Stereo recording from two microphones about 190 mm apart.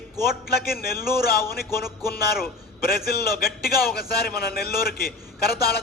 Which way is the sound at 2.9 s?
55° left (ahead or behind).